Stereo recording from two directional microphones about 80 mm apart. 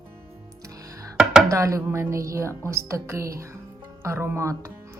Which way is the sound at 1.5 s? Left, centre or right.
Right.